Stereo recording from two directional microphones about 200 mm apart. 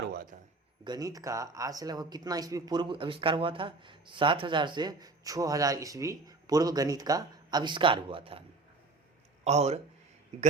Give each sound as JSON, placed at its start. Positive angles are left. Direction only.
{"t": 0.1, "sound": "a man's voice", "side_deg": -50}
{"t": 0.9, "sound": "speech", "side_deg": -20}